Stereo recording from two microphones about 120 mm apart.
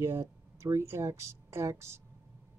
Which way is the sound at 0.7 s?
25° right (ahead or behind).